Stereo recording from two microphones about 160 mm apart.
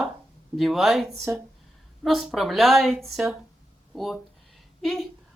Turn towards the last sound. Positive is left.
turn(degrees=0)  # may be behind; listen again after turning